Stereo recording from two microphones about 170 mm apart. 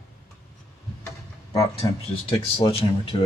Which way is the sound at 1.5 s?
20° left (ahead or behind).